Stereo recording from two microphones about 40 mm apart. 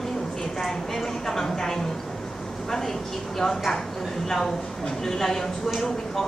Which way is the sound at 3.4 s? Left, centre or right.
Centre.